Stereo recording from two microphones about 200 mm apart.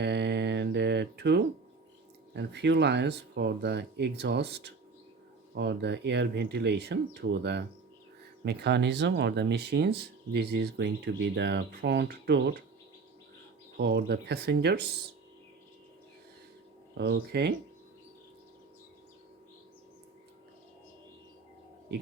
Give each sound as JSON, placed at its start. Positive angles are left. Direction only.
{"t": 0.0, "sound": "mantra", "side_deg": -55}
{"t": 2.3, "sound": "speech", "side_deg": -60}
{"t": 13.7, "sound": "speech", "side_deg": -55}
{"t": 17.0, "sound": "speech", "side_deg": -55}